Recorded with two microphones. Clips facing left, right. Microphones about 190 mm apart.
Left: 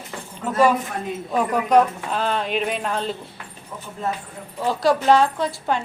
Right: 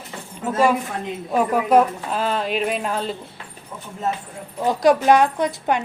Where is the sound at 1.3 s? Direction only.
10° right (ahead or behind).